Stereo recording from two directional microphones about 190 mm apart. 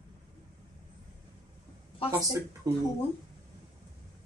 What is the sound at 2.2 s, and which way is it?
Speech, 15° right (ahead or behind).